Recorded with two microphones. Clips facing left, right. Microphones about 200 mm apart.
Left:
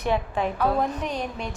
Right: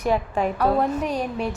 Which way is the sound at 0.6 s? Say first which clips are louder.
Right 5 dB; 10° right (ahead or behind).